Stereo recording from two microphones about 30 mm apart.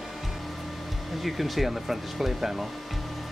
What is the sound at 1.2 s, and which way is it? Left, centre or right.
Speech, centre.